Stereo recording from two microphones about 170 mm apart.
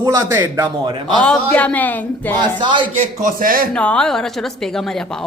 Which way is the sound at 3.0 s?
55° right (ahead or behind).